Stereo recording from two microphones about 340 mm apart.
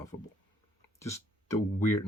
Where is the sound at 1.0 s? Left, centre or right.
Centre.